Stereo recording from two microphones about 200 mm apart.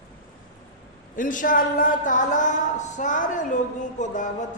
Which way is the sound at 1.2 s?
40° left (ahead or behind).